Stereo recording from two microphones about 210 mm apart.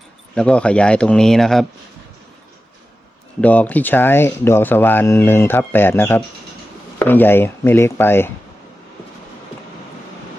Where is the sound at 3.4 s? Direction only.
5° left (ahead or behind).